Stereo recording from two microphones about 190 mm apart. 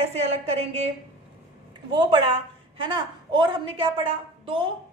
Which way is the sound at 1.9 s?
25° right (ahead or behind).